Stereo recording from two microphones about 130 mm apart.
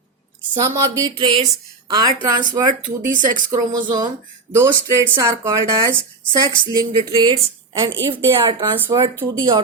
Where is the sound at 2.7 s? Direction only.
90° right.